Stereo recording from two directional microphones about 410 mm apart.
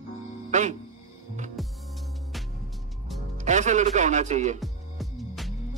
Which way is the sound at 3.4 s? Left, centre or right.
Centre.